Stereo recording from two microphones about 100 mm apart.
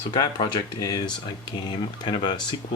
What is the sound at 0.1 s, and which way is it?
Speech, 50° left (ahead or behind).